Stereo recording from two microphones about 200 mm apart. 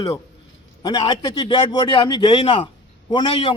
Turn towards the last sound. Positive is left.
turn(degrees=25)  # may be behind; listen again after turning